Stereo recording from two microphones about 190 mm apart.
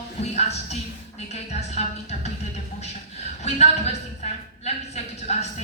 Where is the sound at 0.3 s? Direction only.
35° left (ahead or behind).